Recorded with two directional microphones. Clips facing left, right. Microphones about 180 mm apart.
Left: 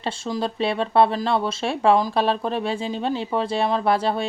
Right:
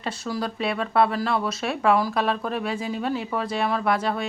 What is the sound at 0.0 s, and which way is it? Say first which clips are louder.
Speech: left 3 dB; 25° left (ahead or behind).